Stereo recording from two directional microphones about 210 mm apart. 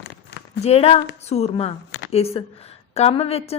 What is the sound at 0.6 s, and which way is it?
A woman's voice, 30° left (ahead or behind).